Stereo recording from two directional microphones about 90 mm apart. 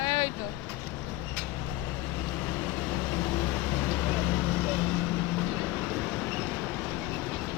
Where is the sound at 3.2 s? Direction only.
15° left (ahead or behind).